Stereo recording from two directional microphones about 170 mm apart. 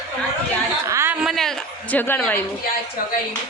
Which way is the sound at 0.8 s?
15° right (ahead or behind).